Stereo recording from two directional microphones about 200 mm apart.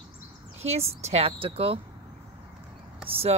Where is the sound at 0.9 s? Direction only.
30° right (ahead or behind).